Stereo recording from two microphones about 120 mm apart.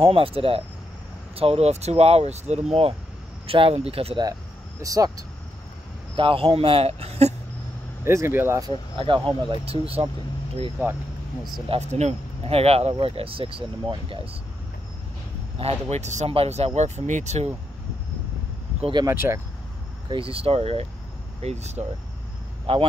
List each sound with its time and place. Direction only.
0.0 s speech: 50° right (ahead or behind); by 2.6 s 65° right (ahead or behind)
3.4 s speech: 50° right (ahead or behind)
4.8 s speech: 30° right (ahead or behind)
6.1 s speech: 45° right (ahead or behind)
8.0 s speech: 20° right (ahead or behind)
8.9 s speech: 45° right (ahead or behind)
10.8 s speech: 20° right (ahead or behind)
11.9 s speech: 60° right (ahead or behind); by 14.2 s 45° right (ahead or behind)
15.6 s speech: 70° right (ahead or behind)
16.3 s speech: 60° right (ahead or behind)
19.0 s speech: 25° right (ahead or behind)
20.1 s speech: 50° right (ahead or behind)
21.4 s speech: 65° right (ahead or behind)
22.7 s speech: 55° right (ahead or behind)